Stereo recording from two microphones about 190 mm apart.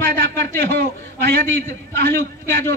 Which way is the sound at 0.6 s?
60° right (ahead or behind).